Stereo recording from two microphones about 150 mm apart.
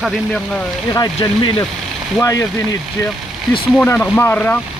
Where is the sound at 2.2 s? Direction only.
20° left (ahead or behind).